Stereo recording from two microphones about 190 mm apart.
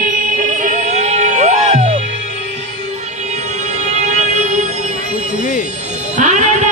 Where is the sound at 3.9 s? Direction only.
40° right (ahead or behind).